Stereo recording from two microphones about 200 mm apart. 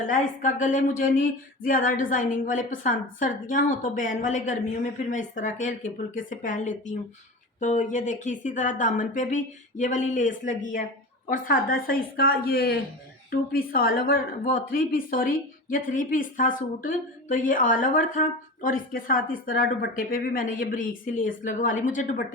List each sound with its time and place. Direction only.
0.0 s speech: 40° left (ahead or behind)